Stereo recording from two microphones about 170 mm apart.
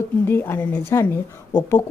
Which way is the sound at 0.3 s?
10° left (ahead or behind).